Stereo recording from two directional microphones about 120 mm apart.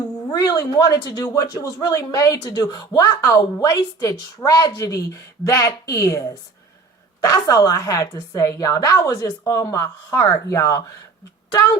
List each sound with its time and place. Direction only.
0.3 s a woman's voice: 30° left (ahead or behind)